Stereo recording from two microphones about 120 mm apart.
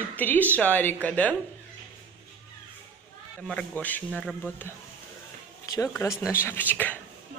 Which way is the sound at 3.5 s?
10° left (ahead or behind).